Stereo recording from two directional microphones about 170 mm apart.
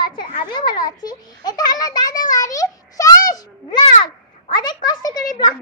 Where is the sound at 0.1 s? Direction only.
25° left (ahead or behind).